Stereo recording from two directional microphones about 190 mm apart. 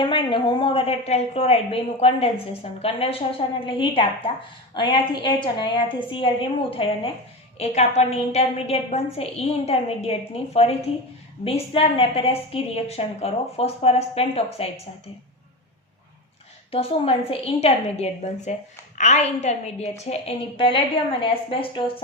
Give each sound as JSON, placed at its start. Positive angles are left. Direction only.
{"t": 0.0, "sound": "a woman's voice", "side_deg": 25}
{"t": 16.7, "sound": "a woman's voice", "side_deg": 30}